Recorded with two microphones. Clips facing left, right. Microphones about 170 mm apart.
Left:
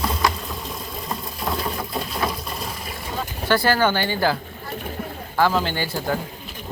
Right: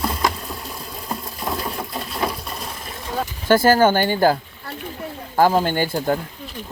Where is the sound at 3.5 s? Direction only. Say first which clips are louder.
Right 5 dB; 45° right (ahead or behind).